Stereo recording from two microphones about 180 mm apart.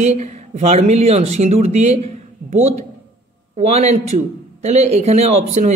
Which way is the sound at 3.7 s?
35° right (ahead or behind).